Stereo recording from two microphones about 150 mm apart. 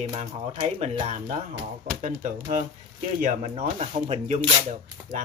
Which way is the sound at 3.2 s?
45° right (ahead or behind).